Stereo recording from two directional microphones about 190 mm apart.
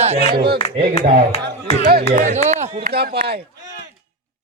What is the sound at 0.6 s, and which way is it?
Speech, 35° left (ahead or behind).